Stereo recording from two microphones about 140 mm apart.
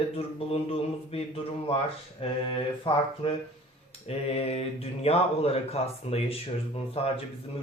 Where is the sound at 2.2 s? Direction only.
40° left (ahead or behind).